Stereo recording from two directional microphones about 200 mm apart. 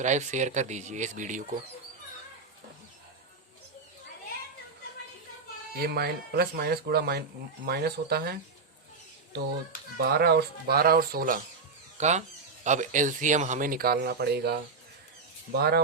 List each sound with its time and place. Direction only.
0.0 s speech: 35° right (ahead or behind)
5.7 s speech: 50° right (ahead or behind)
10.0 s speech: 50° right (ahead or behind)
11.9 s speech: 35° right (ahead or behind); by 15.8 s 55° right (ahead or behind)